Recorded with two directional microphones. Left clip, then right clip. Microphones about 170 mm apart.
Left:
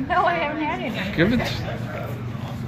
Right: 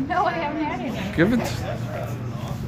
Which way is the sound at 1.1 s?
5° right (ahead or behind).